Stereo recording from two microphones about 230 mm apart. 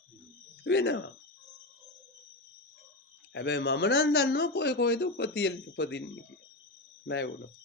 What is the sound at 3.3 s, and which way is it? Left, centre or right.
Speech, left.